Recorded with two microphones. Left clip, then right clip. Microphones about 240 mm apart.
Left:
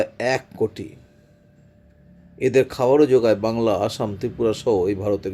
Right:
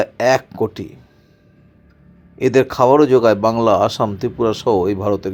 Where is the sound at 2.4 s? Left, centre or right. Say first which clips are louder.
Right 5 dB; centre.